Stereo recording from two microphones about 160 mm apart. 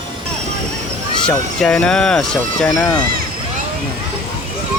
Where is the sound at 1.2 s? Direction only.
5° left (ahead or behind).